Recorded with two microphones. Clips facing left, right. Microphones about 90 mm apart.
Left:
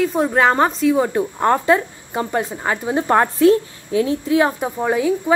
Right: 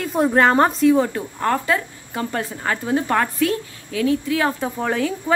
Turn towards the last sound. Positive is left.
turn(degrees=10)  # may be behind; listen again after turning